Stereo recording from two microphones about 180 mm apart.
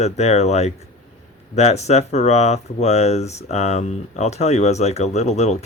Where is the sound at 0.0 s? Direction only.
35° left (ahead or behind).